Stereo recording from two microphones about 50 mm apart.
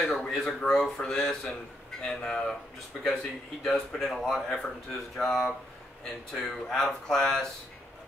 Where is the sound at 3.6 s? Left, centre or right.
Centre.